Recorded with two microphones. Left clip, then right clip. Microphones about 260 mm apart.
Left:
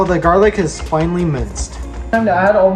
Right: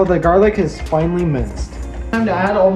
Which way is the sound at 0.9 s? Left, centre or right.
Left.